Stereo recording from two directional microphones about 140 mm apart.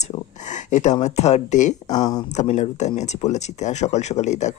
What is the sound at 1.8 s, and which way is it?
Speech, 30° left (ahead or behind).